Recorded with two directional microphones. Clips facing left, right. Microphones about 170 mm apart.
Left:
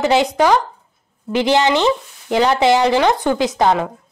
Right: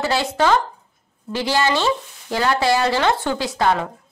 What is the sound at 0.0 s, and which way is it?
Speech, 20° left (ahead or behind).